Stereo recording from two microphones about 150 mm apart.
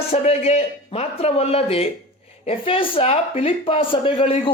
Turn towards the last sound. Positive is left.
turn(degrees=40)  # may be behind; listen again after turning